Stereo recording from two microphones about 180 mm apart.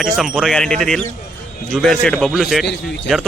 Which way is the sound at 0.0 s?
Centre (ahead or behind).